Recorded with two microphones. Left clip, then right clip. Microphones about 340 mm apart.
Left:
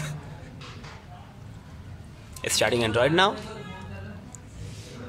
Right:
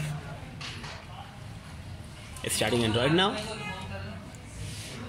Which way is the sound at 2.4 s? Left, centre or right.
Left.